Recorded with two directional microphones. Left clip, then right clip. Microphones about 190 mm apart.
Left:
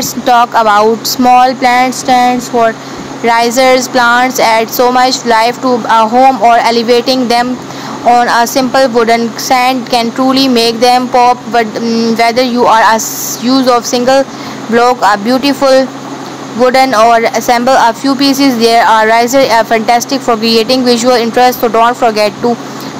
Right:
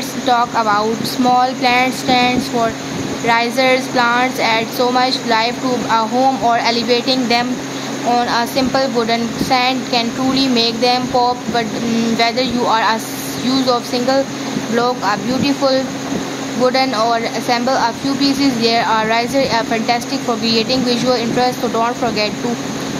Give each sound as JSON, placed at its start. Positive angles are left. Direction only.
{"t": 0.3, "sound": "speech", "side_deg": 30}
{"t": 11.9, "sound": "a sound", "side_deg": 20}
{"t": 12.3, "sound": "speech", "side_deg": 30}